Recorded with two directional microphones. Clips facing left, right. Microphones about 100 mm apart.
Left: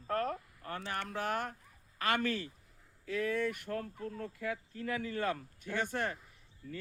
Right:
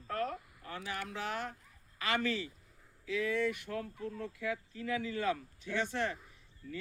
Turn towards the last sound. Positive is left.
turn(degrees=40)  # may be behind; listen again after turning